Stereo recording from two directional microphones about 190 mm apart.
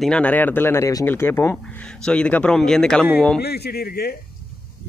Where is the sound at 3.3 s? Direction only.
60° left (ahead or behind).